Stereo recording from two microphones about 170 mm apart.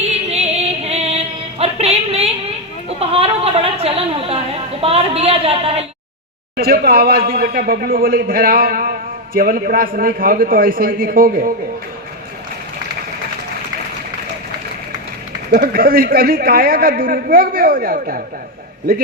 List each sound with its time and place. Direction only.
0.0 s singing: 40° right (ahead or behind)
3.0 s a sound: 35° right (ahead or behind)
6.6 s a man's voice: 65° right (ahead or behind)
15.5 s a man's voice: 60° right (ahead or behind)